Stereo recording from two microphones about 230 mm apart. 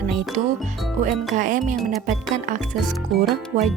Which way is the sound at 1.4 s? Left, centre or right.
Right.